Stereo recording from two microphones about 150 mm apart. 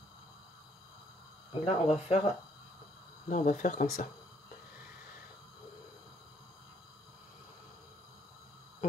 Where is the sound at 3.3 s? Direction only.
55° left (ahead or behind).